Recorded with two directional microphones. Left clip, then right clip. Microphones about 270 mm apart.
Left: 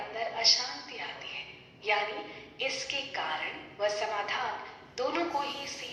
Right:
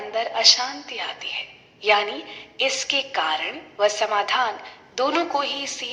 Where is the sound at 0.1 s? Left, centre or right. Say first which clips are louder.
Right 10 dB; right.